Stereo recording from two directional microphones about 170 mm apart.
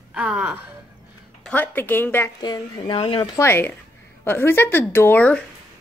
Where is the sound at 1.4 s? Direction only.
10° left (ahead or behind).